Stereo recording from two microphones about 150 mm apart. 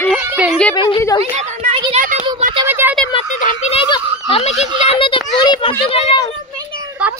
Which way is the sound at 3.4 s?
60° left (ahead or behind).